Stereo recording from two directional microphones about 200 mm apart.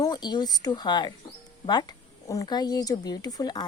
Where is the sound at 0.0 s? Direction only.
20° left (ahead or behind).